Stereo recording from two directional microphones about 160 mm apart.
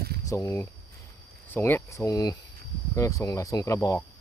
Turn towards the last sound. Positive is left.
turn(degrees=15)  # may be behind; listen again after turning